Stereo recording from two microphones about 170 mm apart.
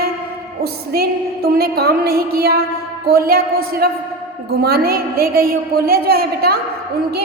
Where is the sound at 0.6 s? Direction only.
65° right (ahead or behind).